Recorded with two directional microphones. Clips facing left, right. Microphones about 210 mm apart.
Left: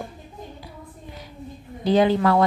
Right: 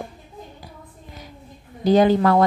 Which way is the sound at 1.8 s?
45° right (ahead or behind).